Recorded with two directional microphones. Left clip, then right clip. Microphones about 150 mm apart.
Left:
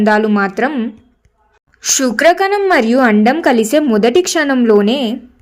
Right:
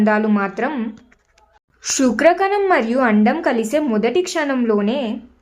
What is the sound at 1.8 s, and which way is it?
Speech, 30° left (ahead or behind).